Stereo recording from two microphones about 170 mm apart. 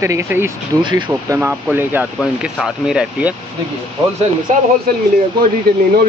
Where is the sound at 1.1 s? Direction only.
15° right (ahead or behind).